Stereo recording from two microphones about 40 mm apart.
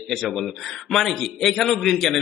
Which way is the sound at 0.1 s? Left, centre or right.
Centre.